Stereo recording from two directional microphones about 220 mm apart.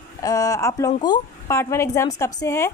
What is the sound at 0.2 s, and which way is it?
A woman's voice, 15° left (ahead or behind).